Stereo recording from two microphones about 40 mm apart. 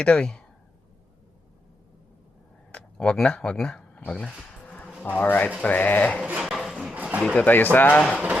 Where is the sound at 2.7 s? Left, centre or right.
Left.